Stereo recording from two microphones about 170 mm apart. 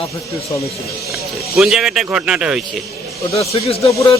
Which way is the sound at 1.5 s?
5° right (ahead or behind).